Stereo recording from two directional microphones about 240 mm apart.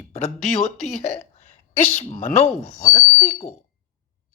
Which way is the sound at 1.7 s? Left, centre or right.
Left.